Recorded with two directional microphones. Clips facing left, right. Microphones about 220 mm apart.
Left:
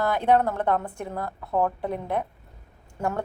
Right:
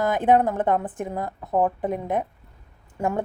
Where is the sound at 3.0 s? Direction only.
20° right (ahead or behind).